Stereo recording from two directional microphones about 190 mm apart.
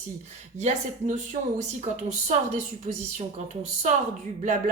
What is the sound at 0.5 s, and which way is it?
Speech, 40° right (ahead or behind).